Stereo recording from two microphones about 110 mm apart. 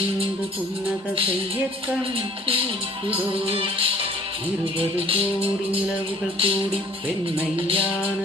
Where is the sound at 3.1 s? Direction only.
55° right (ahead or behind).